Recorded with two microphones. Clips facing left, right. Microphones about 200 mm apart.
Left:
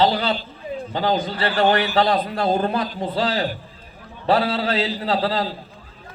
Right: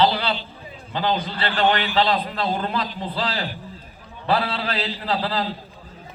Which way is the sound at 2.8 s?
50° left (ahead or behind).